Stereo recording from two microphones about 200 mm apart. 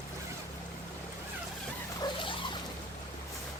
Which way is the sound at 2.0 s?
25° left (ahead or behind).